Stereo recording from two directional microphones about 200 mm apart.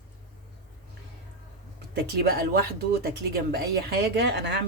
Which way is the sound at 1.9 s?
50° right (ahead or behind).